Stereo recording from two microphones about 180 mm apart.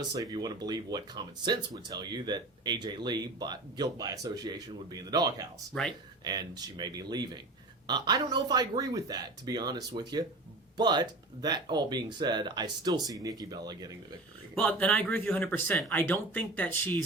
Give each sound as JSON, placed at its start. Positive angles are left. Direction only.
{"t": 0.1, "sound": "speech", "side_deg": -20}
{"t": 5.7, "sound": "speech", "side_deg": 5}
{"t": 6.2, "sound": "speech", "side_deg": -20}
{"t": 14.5, "sound": "speech", "side_deg": 5}